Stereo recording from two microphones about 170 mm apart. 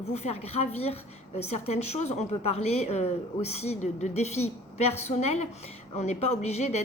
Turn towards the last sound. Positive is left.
turn(degrees=40)  # may be behind; listen again after turning